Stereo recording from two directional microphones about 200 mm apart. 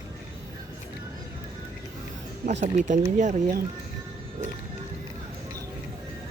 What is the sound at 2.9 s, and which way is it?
Speech, 40° right (ahead or behind).